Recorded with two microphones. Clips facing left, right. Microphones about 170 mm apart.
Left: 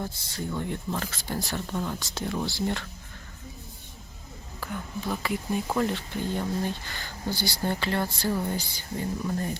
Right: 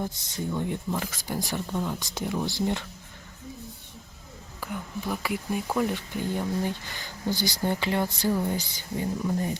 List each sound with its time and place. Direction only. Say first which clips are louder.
0.0 s speech: right 2 dB; 20° right (ahead or behind)
4.6 s speech: even; 10° right (ahead or behind)